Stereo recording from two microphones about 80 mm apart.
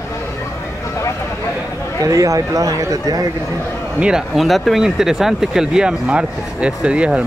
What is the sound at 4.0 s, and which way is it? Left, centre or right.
Speech, centre.